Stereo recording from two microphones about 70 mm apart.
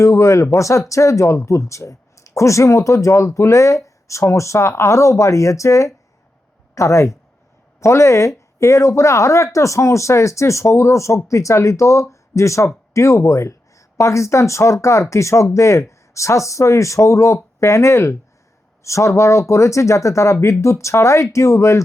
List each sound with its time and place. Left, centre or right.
0.0 s speech: left